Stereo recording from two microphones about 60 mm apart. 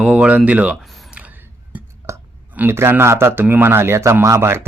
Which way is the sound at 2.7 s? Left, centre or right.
Right.